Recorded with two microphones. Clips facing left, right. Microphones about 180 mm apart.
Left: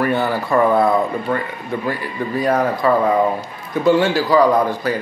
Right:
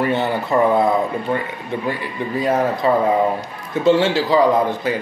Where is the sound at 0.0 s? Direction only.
25° right (ahead or behind).